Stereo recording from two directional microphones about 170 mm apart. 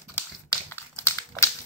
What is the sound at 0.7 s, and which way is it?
Crumpling, 15° left (ahead or behind).